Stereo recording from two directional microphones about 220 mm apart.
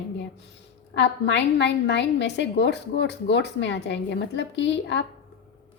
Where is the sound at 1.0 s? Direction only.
50° left (ahead or behind).